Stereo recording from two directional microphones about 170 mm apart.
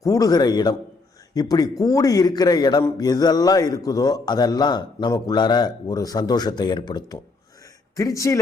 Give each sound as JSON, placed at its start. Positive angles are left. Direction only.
{"t": 0.0, "sound": "a man's voice", "side_deg": 20}